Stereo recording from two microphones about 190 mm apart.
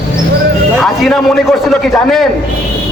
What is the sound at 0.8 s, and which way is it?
A man's voice, centre (ahead or behind).